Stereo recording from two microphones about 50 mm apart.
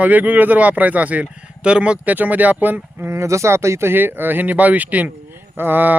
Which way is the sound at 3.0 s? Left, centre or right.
Right.